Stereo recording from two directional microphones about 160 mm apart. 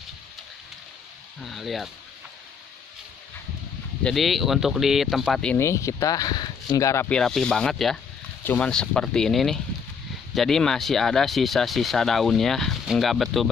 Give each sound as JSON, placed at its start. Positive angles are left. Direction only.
{"t": 1.4, "sound": "speech", "side_deg": 0}
{"t": 4.0, "sound": "speech", "side_deg": 0}
{"t": 5.6, "sound": "speech", "side_deg": 20}
{"t": 7.1, "sound": "speech", "side_deg": 5}